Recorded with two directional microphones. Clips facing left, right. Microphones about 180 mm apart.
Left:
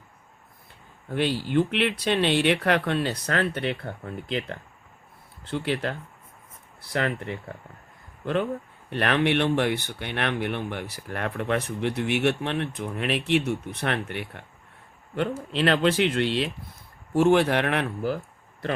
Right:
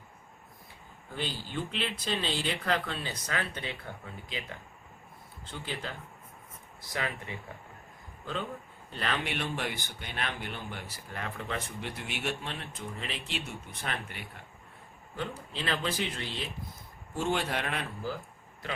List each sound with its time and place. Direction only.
1.1 s speech: 65° left (ahead or behind)
8.9 s speech: 70° left (ahead or behind)
17.2 s speech: 70° left (ahead or behind)